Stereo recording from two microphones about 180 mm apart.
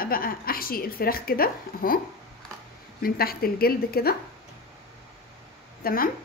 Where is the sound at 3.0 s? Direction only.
55° left (ahead or behind).